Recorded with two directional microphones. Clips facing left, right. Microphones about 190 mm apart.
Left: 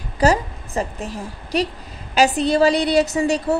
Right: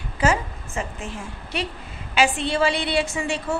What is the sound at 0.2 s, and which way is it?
A woman's voice, 35° left (ahead or behind).